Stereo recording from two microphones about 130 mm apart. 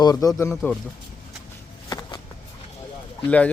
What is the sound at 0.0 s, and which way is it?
Speech, 30° left (ahead or behind).